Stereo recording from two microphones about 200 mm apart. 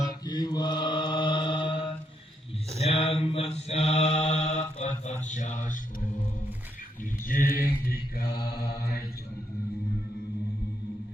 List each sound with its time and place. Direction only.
0.3 s mantra: 20° left (ahead or behind)
5.3 s speech: 35° left (ahead or behind)
7.3 s mantra: 45° left (ahead or behind)